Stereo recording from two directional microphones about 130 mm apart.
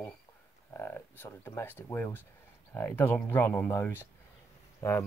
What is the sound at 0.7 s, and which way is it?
Speech, 15° left (ahead or behind).